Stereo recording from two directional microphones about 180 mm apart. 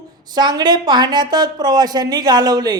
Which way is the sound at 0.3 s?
25° right (ahead or behind).